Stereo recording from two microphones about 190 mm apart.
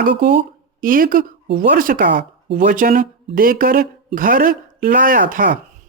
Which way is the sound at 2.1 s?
70° right (ahead or behind).